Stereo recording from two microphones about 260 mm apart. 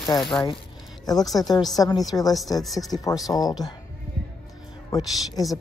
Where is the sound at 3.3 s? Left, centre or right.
Centre.